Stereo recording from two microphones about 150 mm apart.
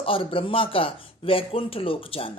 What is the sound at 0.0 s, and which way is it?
Speech, 35° left (ahead or behind).